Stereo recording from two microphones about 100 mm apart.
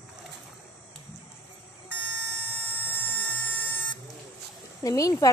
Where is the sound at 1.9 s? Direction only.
15° left (ahead or behind).